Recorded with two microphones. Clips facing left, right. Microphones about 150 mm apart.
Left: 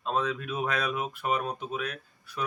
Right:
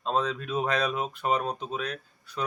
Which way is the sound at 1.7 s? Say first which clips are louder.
Right 1 dB; 5° left (ahead or behind).